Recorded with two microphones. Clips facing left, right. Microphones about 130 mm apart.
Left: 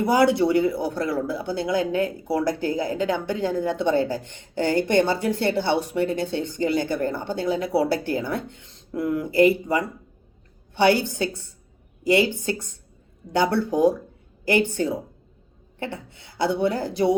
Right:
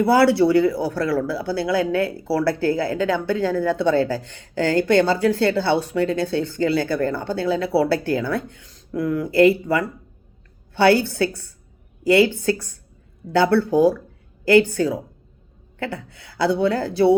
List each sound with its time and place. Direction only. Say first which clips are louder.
0.0 s speech: right 3 dB; 20° left (ahead or behind)